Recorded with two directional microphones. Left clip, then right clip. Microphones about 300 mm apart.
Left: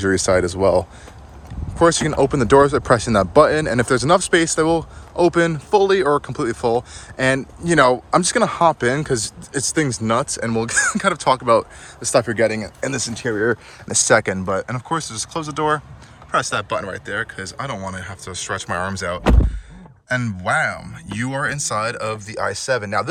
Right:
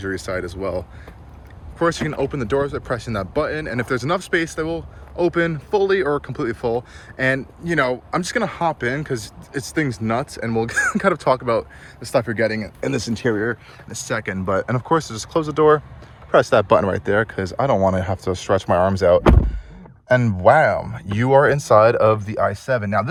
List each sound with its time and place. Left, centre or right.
0.0 s speech: centre
13.8 s speech: left
14.3 s speech: centre